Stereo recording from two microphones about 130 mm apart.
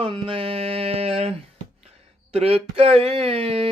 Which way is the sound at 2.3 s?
50° right (ahead or behind).